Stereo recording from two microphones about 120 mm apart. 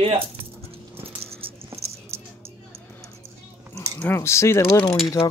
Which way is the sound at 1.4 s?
50° right (ahead or behind).